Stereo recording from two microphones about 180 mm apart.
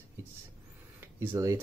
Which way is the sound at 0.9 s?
15° right (ahead or behind).